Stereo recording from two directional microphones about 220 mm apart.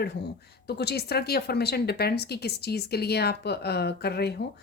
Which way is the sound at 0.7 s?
45° left (ahead or behind).